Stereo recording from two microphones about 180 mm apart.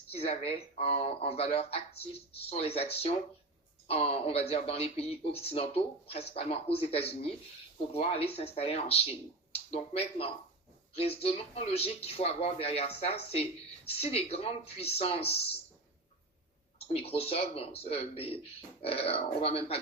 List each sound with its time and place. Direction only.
0.1 s speech: 35° left (ahead or behind)
16.7 s speech: 35° left (ahead or behind)